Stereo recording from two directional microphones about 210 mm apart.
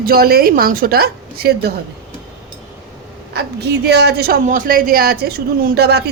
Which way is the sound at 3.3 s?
50° right (ahead or behind).